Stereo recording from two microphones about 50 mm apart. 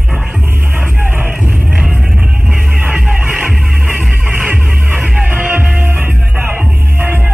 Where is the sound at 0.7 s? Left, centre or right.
Right.